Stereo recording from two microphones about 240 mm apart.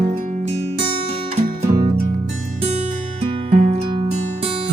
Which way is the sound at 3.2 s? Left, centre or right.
Right.